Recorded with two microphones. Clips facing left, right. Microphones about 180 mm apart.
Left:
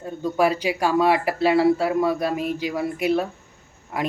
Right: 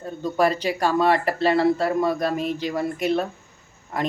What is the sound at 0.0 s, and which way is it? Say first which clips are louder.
Speech: even; 10° left (ahead or behind).